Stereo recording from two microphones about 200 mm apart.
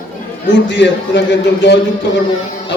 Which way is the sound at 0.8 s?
65° left (ahead or behind).